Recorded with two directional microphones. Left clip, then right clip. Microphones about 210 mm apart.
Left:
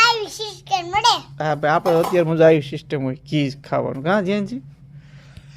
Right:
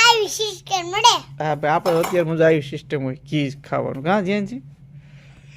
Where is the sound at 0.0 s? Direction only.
45° right (ahead or behind).